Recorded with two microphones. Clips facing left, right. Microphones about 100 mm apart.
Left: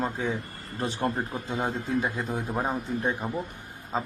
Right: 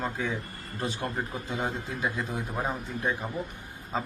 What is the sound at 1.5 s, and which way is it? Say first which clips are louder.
Speech: left 5 dB; 35° left (ahead or behind).